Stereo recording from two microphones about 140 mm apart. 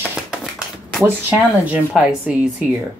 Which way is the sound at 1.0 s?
10° right (ahead or behind).